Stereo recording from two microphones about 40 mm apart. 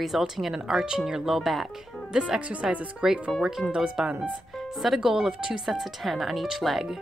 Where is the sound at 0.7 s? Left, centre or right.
Centre.